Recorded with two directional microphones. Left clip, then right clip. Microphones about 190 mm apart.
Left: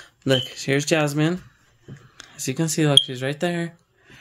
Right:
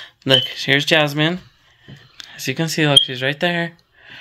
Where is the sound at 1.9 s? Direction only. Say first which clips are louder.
Right 2 dB; 5° left (ahead or behind).